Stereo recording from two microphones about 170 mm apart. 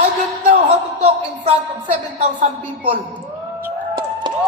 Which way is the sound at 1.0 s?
35° right (ahead or behind).